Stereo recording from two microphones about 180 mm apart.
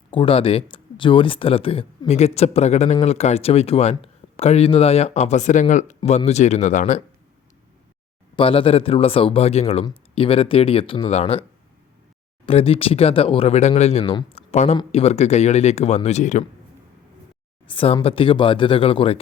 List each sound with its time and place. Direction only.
0.1 s speech: 30° left (ahead or behind)
8.4 s speech: 30° left (ahead or behind)
12.5 s speech: 30° left (ahead or behind)
14.0 s speech: 25° left (ahead or behind)
17.7 s speech: 30° left (ahead or behind)